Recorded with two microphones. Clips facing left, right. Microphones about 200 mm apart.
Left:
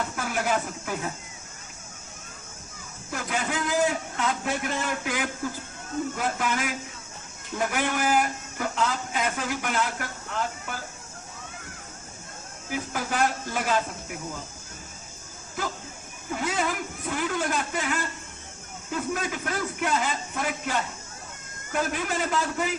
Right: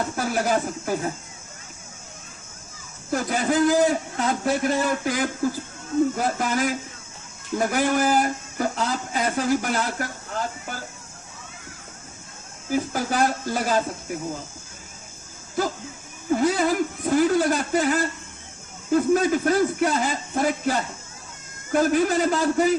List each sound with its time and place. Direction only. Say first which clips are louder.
0.0 s speech: right 4 dB; 35° right (ahead or behind)
3.1 s speech: right 7 dB; 35° right (ahead or behind)
12.7 s speech: right 6 dB; 35° right (ahead or behind)
16.3 s speech: right 8 dB; 35° right (ahead or behind)